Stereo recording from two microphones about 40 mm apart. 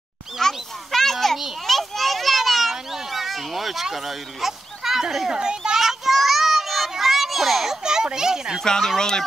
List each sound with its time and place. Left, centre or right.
0.4 s a sound: centre
1.7 s children playing: centre
3.8 s a child's voice: centre
5.8 s children playing: centre
7.8 s speech: centre
8.6 s speech: centre